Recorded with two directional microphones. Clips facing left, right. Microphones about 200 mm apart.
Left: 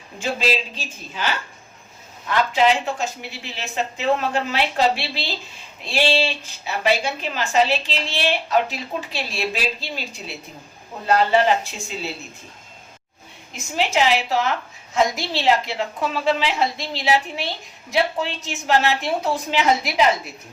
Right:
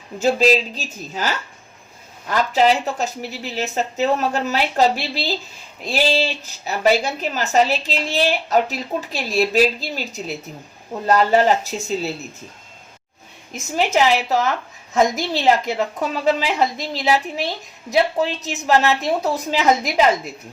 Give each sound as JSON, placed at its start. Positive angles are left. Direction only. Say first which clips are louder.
{"t": 0.2, "sound": "a woman's voice", "louder": "right 7 dB", "side_deg": -40}
{"t": 2.3, "sound": "a woman's voice", "louder": "right 2 dB", "side_deg": -40}
{"t": 13.7, "sound": "a woman's voice", "louder": "right 2 dB", "side_deg": -40}